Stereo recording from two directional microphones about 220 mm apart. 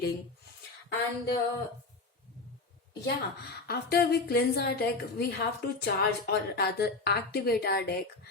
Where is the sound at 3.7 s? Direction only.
45° left (ahead or behind).